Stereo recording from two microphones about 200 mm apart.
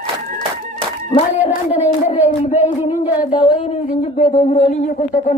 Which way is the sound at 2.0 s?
35° left (ahead or behind).